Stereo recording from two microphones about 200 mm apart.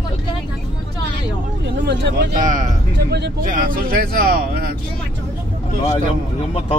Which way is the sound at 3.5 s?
45° right (ahead or behind).